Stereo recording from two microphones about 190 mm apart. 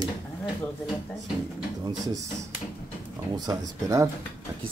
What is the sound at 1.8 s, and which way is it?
Speech, 20° right (ahead or behind).